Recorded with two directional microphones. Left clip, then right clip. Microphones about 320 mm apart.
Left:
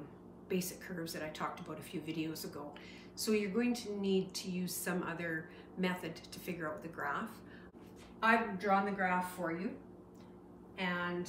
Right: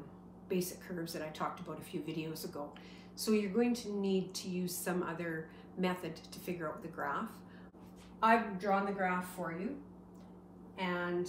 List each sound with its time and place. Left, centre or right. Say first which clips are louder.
0.5 s speech: right 2 dB; centre
10.8 s speech: even; centre